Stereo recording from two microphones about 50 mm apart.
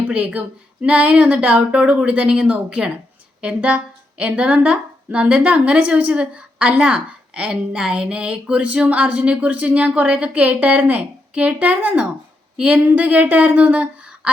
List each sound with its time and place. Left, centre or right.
0.3 s a woman's voice: right
4.5 s a woman's voice: centre